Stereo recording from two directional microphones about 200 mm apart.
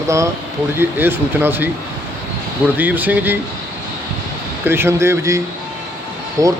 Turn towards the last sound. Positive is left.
turn(degrees=-15)  # may be behind; listen again after turning